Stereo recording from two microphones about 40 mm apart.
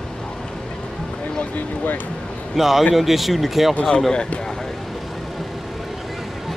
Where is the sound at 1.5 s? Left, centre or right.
Left.